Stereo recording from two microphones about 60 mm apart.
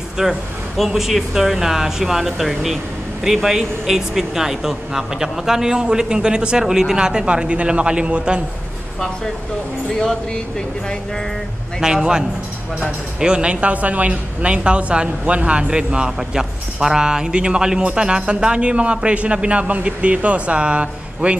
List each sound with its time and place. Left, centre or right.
0.2 s speech: centre
11.8 s a woman's voice: centre